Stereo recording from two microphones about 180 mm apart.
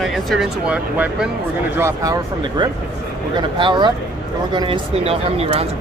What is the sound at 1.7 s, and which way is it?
Speech, 15° right (ahead or behind).